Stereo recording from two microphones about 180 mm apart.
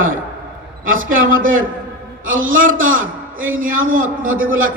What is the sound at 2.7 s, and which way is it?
Speech, 90° right.